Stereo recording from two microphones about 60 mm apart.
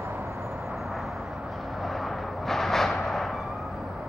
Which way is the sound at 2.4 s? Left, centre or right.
Centre.